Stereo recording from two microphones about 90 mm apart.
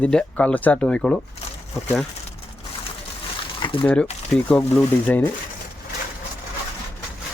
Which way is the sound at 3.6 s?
65° left (ahead or behind).